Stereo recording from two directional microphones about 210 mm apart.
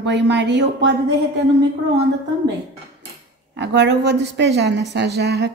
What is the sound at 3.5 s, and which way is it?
A woman's voice, 55° right (ahead or behind).